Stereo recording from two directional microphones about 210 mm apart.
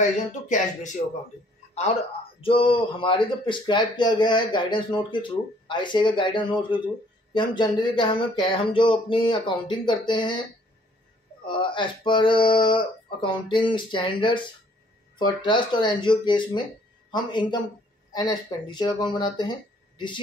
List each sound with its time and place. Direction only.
0.0 s speech: 35° left (ahead or behind)
2.4 s speech: 25° left (ahead or behind)
11.4 s speech: 25° left (ahead or behind)